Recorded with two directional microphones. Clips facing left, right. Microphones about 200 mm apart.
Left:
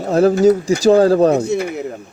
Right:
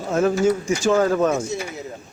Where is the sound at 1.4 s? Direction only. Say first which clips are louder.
Left 9 dB; 60° left (ahead or behind).